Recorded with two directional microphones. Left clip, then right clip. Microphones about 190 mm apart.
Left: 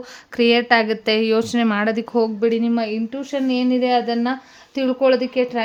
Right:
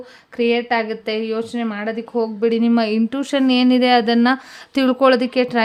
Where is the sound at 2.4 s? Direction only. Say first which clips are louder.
Right 1 dB; 5° right (ahead or behind).